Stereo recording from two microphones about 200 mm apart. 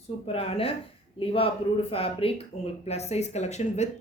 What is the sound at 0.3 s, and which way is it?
A woman's voice, 30° left (ahead or behind).